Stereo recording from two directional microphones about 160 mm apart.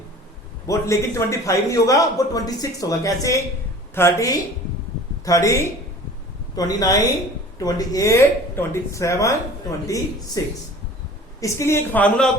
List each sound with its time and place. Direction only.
0.7 s a man's voice: 20° left (ahead or behind)